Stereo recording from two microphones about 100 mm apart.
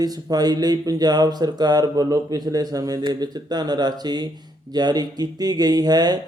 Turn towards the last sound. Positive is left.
turn(degrees=-40)  # may be behind; listen again after turning